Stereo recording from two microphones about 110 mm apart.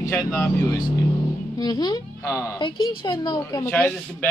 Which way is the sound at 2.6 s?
45° left (ahead or behind).